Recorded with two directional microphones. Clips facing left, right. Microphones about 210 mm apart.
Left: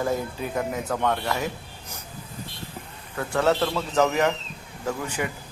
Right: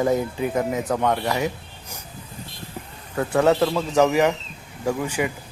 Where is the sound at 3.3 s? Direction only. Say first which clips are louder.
Right 4 dB; 15° right (ahead or behind).